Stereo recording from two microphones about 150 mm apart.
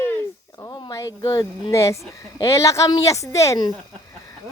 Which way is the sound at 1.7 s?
20° left (ahead or behind).